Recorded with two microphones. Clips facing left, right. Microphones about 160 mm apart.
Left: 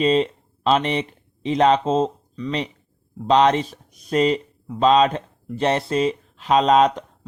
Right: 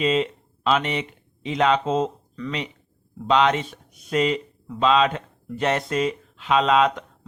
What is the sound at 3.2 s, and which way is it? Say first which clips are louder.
Speech: left 3 dB; 35° left (ahead or behind).